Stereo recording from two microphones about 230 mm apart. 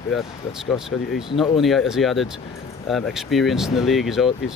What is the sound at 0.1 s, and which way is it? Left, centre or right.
Speech, centre.